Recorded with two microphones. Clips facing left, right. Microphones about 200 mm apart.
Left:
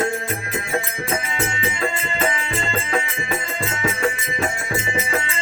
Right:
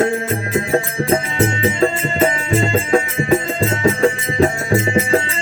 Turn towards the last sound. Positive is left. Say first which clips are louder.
# right 8 dB
turn(degrees=-35)  # may be behind; listen again after turning